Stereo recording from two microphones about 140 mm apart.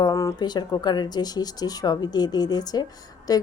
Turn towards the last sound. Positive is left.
turn(degrees=25)  # may be behind; listen again after turning